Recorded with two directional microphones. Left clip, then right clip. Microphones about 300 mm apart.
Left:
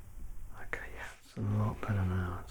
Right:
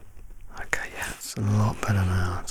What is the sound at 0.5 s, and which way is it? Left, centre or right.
Whispering, right.